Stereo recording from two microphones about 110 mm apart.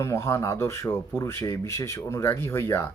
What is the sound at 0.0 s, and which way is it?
Speech, 25° left (ahead or behind).